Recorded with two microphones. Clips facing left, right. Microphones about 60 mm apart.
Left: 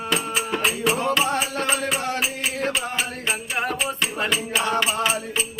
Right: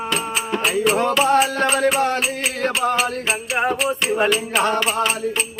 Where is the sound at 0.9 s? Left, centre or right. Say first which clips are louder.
Right 5 dB; right.